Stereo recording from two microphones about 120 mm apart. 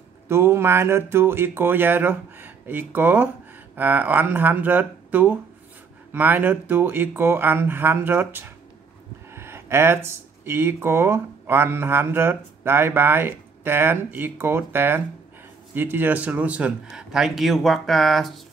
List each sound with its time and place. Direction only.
0.3 s speech: 20° right (ahead or behind); by 18.4 s centre (ahead or behind)